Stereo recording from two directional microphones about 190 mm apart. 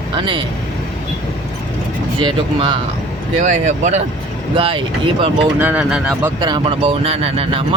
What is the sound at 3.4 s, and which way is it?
Speech, 40° right (ahead or behind).